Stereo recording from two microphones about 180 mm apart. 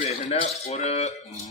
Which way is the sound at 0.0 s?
35° left (ahead or behind).